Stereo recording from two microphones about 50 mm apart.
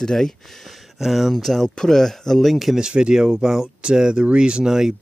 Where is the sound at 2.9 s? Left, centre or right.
Centre.